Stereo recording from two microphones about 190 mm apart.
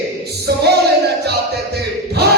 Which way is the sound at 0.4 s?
60° right (ahead or behind).